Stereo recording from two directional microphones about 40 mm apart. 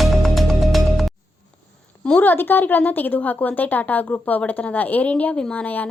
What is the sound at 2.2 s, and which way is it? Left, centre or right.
Speech, left.